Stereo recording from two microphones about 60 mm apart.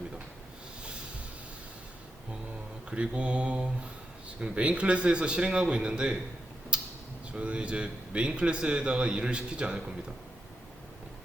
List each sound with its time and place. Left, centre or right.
2.9 s mantra: right
4.4 s a man's voice: right
6.7 s a sound: centre
7.3 s a man's voice: centre